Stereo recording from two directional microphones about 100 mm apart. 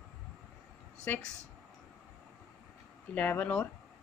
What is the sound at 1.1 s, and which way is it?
Speech, 15° left (ahead or behind).